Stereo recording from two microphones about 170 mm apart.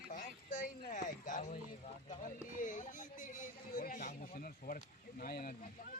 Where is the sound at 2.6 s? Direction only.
50° left (ahead or behind).